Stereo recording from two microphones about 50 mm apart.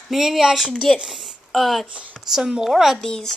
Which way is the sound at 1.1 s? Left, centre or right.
Centre.